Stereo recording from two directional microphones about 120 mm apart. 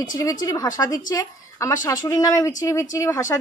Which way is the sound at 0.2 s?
30° left (ahead or behind).